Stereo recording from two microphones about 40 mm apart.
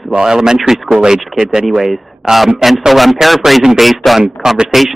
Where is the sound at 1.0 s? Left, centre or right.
Centre.